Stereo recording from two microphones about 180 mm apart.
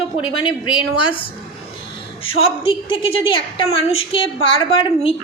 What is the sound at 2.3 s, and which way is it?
A woman's voice, 30° left (ahead or behind).